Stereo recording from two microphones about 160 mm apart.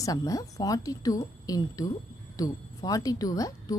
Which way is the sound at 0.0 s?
20° left (ahead or behind).